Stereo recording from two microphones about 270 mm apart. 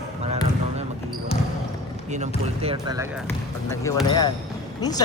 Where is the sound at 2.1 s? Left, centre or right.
Right.